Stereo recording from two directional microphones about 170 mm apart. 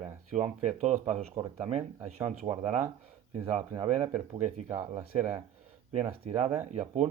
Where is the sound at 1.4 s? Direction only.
35° right (ahead or behind).